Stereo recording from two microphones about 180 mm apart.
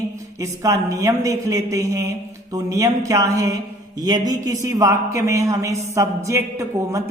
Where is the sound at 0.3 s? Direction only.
20° right (ahead or behind).